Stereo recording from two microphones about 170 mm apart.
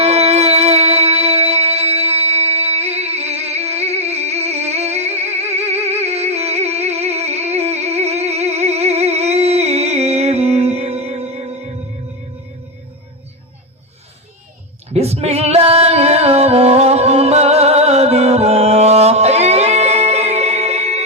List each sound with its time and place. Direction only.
0.0 s music: 40° right (ahead or behind)
14.9 s music: 40° right (ahead or behind)